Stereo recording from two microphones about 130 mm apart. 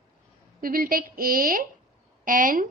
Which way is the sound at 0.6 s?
90° right.